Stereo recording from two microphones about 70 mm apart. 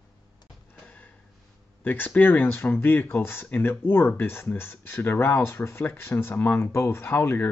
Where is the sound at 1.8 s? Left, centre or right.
Left.